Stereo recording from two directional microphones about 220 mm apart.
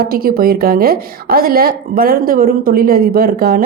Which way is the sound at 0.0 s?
45° right (ahead or behind).